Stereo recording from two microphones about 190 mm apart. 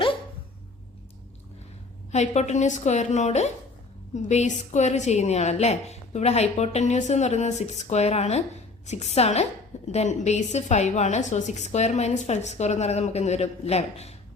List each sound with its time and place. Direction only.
2.1 s a woman's voice: 35° left (ahead or behind)